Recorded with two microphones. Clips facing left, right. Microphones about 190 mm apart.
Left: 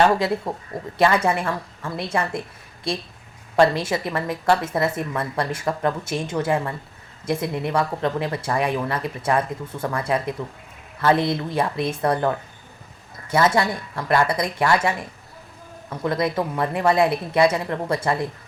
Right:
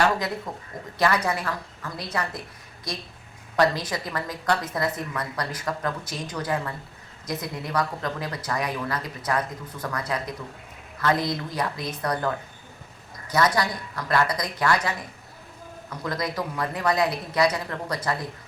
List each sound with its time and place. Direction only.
0.0 s speech: 25° left (ahead or behind)